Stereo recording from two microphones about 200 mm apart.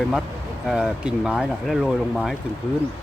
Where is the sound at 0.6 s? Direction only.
Centre (ahead or behind).